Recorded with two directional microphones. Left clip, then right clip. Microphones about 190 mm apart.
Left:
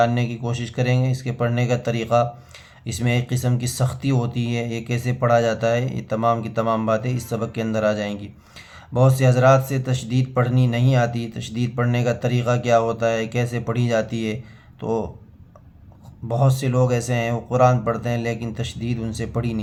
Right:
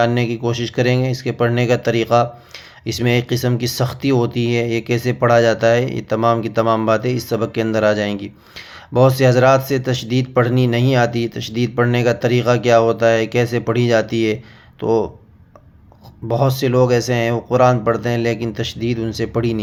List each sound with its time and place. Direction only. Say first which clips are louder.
0.0 s speech: right 4 dB; 25° right (ahead or behind)
16.3 s speech: right 6 dB; 25° right (ahead or behind)